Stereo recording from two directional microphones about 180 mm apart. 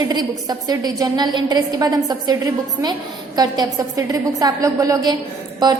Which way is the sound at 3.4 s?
20° right (ahead or behind).